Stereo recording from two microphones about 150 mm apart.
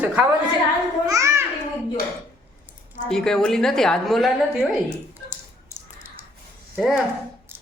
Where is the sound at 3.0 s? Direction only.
5° left (ahead or behind).